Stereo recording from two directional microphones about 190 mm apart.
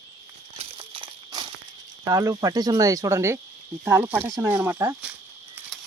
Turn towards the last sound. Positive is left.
turn(degrees=-15)  # may be behind; listen again after turning